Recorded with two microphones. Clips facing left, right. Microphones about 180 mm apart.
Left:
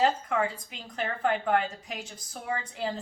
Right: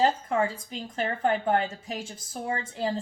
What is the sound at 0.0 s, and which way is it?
Speech, 30° right (ahead or behind).